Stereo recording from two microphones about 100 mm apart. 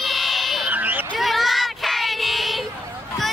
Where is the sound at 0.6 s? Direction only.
15° right (ahead or behind).